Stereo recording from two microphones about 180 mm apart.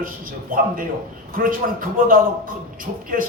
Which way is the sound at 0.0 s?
50° right (ahead or behind).